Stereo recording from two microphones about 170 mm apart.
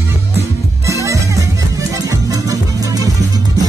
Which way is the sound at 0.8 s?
20° right (ahead or behind).